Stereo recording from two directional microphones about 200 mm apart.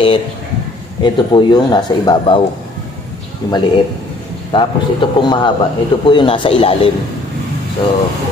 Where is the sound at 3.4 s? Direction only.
20° left (ahead or behind).